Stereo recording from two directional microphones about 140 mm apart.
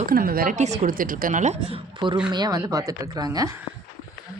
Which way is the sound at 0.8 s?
80° right.